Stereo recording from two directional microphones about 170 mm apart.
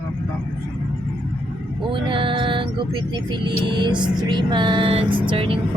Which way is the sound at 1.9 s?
30° right (ahead or behind).